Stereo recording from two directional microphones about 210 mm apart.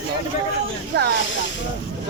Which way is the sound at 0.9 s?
50° right (ahead or behind).